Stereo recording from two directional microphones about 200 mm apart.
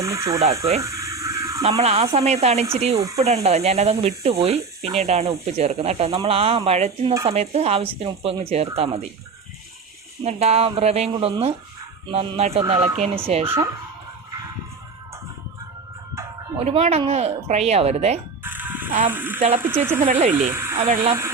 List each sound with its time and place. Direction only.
0.0 s speech: 15° right (ahead or behind)
0.8 s a sound: 15° right (ahead or behind)
1.8 s speech: 30° right (ahead or behind)
3.0 s speech: 15° right (ahead or behind)
3.2 s speech: 30° right (ahead or behind)
10.2 s speech: 30° right (ahead or behind)
16.6 s speech: 30° right (ahead or behind)
18.4 s a sound: 10° right (ahead or behind)
19.1 s speech: 10° right (ahead or behind)
20.1 s speech: 35° right (ahead or behind)
20.3 s speech: 10° right (ahead or behind)